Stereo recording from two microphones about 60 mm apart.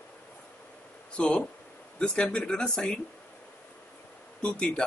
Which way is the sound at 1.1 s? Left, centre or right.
Centre.